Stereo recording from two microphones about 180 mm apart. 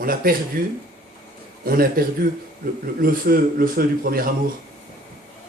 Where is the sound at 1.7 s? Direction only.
55° right (ahead or behind).